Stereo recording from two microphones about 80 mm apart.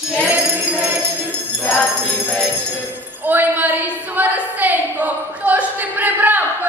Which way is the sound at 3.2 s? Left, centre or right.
Right.